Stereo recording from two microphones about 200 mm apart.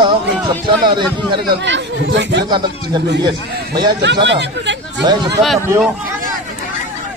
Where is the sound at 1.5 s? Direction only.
65° right (ahead or behind).